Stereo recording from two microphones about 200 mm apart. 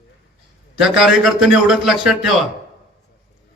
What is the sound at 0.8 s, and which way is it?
A man's voice, centre (ahead or behind).